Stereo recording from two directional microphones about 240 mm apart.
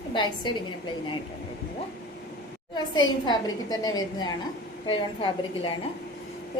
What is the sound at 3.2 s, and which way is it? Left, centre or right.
A woman's voice, centre.